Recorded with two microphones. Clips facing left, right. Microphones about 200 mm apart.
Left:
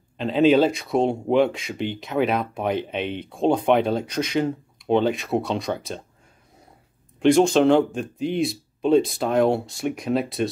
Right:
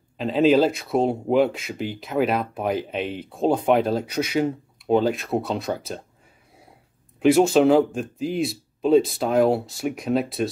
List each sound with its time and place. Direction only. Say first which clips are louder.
0.2 s speech: even; centre (ahead or behind)
7.2 s speech: even; 5° right (ahead or behind)